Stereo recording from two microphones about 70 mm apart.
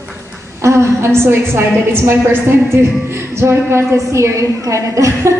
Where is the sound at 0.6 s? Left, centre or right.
Right.